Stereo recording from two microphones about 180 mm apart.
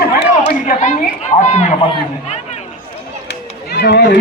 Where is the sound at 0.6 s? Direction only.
45° left (ahead or behind).